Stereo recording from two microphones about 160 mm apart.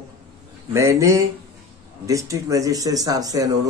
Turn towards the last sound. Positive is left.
turn(degrees=-20)  # may be behind; listen again after turning